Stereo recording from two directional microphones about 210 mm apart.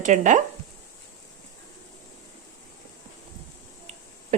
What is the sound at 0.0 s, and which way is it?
Speech, 35° right (ahead or behind).